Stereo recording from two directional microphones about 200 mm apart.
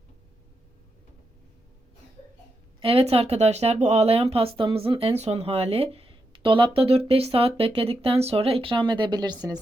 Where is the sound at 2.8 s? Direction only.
30° right (ahead or behind).